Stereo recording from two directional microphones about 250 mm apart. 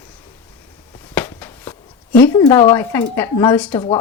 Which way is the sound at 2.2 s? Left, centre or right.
Centre.